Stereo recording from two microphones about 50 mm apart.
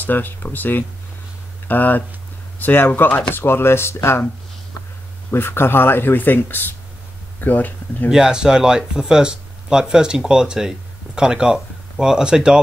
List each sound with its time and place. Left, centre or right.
0.0 s speech: left
5.3 s speech: left
8.1 s speech: centre